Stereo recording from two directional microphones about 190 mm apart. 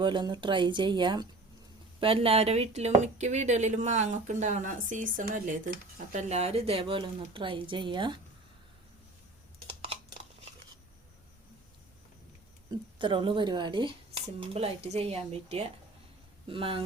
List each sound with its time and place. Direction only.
0.0 s speech: 25° right (ahead or behind)
13.0 s speech: 25° right (ahead or behind)